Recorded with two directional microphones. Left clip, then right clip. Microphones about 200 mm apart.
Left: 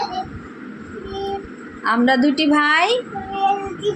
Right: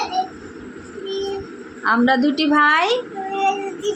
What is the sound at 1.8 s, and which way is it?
A woman's voice, 5° right (ahead or behind).